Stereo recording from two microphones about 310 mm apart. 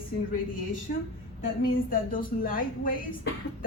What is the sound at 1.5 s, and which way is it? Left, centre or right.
Speech, left.